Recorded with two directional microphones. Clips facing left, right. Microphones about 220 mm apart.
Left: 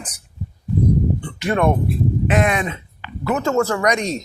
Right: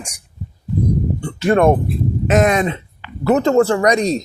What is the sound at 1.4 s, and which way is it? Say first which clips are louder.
Speech: right 5 dB; 45° right (ahead or behind).